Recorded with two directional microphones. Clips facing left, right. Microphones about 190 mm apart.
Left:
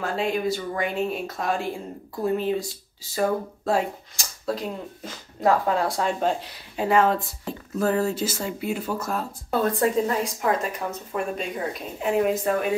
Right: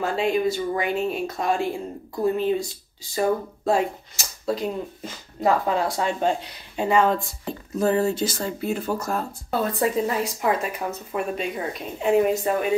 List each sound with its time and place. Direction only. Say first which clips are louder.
0.0 s speech: right 3 dB; centre (ahead or behind)
7.8 s speech: right 2 dB; 20° right (ahead or behind)
8.1 s speech: right 2 dB; 5° left (ahead or behind)